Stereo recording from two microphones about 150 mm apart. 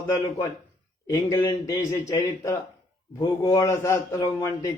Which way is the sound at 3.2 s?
25° left (ahead or behind).